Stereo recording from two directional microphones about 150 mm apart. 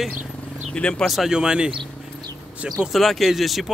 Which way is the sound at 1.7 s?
30° right (ahead or behind).